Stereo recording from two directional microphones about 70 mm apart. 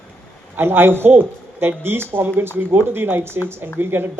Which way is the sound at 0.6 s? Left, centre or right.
Right.